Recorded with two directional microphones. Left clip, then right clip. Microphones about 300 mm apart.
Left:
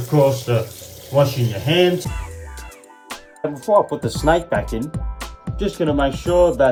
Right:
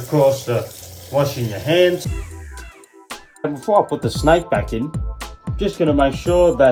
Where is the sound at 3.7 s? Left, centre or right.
Centre.